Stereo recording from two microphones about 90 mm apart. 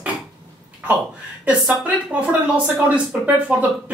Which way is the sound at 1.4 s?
15° right (ahead or behind).